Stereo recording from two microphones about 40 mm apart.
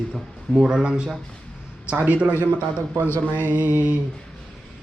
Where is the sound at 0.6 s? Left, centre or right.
Centre.